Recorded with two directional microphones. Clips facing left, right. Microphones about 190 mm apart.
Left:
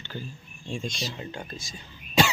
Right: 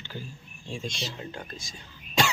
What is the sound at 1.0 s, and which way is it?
Speech, centre (ahead or behind).